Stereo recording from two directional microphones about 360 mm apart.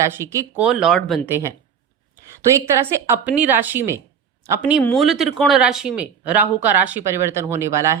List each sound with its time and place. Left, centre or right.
0.0 s speech: centre
2.6 s speech: centre